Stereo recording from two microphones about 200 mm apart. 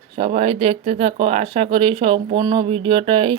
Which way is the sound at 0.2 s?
30° right (ahead or behind).